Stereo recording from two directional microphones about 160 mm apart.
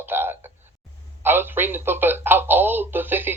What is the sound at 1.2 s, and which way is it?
Speech, 15° right (ahead or behind).